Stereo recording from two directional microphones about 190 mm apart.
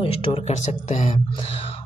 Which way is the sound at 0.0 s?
30° left (ahead or behind).